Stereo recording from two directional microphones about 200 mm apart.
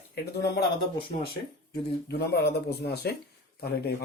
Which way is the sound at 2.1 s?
55° left (ahead or behind).